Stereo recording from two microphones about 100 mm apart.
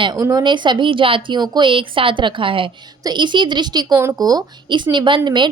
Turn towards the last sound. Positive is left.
turn(degrees=-50)  # may be behind; listen again after turning